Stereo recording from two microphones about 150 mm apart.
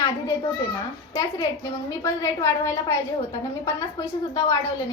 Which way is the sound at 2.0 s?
20° left (ahead or behind).